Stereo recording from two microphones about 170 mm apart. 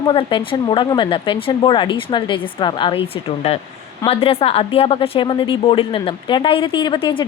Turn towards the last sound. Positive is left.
turn(degrees=30)  # may be behind; listen again after turning